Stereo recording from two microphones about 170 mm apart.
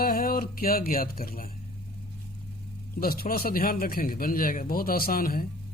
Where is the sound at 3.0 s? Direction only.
60° left (ahead or behind).